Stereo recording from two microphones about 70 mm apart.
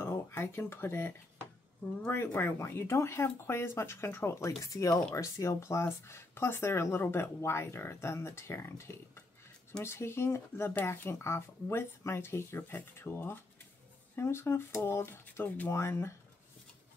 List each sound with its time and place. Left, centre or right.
0.4 s speech: left
15.7 s speech: left